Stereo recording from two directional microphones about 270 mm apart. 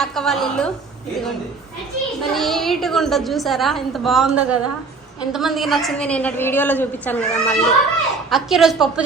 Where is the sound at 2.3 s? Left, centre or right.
Centre.